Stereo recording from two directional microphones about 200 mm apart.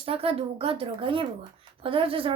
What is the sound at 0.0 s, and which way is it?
A woman's voice, 30° right (ahead or behind).